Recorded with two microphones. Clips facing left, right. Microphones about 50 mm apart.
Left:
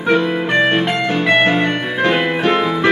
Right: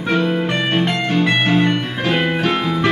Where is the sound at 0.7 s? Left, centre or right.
Centre.